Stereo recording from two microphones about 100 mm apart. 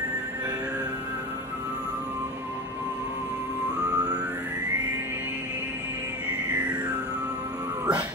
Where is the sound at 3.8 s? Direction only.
40° right (ahead or behind).